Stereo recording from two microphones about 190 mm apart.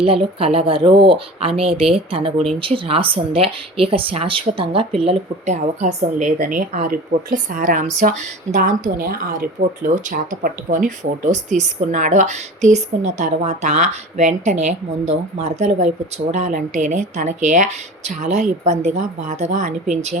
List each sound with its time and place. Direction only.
0.0 s a woman's voice: 30° right (ahead or behind)